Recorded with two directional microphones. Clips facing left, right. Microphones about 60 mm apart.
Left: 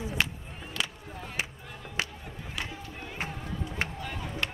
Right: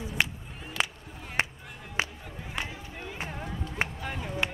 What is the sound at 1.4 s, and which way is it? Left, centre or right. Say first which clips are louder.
Music: right 6 dB; right.